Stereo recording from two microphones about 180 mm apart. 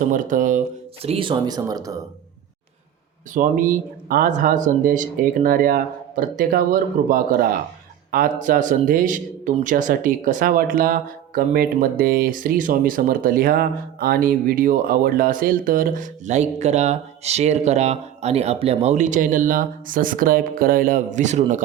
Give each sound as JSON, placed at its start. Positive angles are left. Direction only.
{"t": 0.0, "sound": "speech", "side_deg": -45}
{"t": 1.0, "sound": "speech", "side_deg": -30}
{"t": 3.3, "sound": "speech", "side_deg": -50}